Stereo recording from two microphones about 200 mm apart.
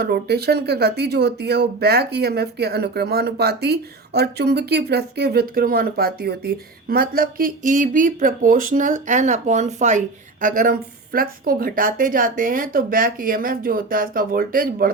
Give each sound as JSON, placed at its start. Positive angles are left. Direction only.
{"t": 0.0, "sound": "speech", "side_deg": -50}